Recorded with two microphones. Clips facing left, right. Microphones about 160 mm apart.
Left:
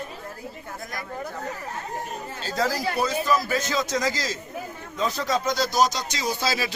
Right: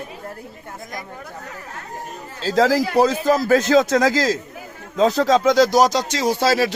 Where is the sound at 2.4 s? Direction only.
90° right; by 6.7 s 70° right (ahead or behind).